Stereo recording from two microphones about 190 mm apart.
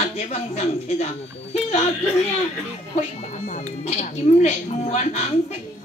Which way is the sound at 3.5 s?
40° left (ahead or behind).